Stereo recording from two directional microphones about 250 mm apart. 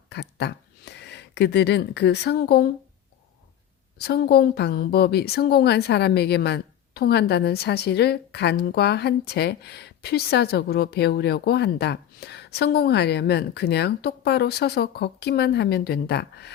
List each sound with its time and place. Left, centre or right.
0.1 s speech: left
3.9 s a woman's voice: left